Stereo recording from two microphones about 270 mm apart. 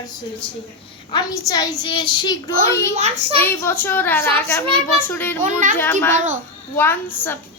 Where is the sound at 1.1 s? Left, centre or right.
Centre.